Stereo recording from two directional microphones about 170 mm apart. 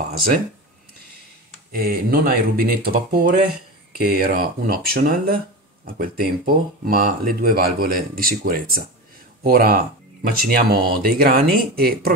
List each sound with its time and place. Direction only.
1.7 s speech: 60° right (ahead or behind)